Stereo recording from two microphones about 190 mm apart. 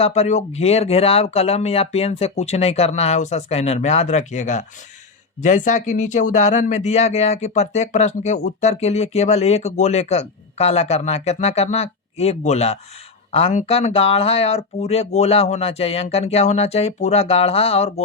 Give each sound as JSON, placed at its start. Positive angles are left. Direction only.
{"t": 0.0, "sound": "speech", "side_deg": 35}